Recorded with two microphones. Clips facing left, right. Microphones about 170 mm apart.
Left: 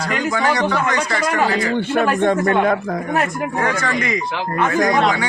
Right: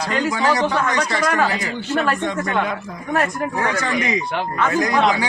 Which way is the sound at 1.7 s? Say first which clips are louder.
Left 4 dB; 60° left (ahead or behind).